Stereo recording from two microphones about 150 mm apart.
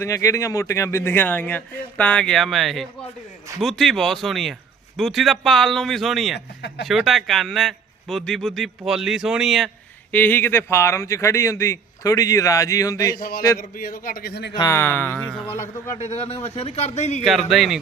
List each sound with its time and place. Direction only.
0.0 s a man's voice: 20° left (ahead or behind); by 9.6 s 5° right (ahead or behind)
10.1 s a man's voice: 10° left (ahead or behind)
13.1 s a man's voice: 80° left
14.5 s speech: 20° left (ahead or behind)
15.1 s speech: 15° right (ahead or behind)
16.0 s speech: 45° left (ahead or behind)
17.2 s a man's voice: centre (ahead or behind)